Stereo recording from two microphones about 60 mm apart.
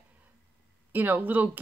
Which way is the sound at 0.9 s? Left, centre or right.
Right.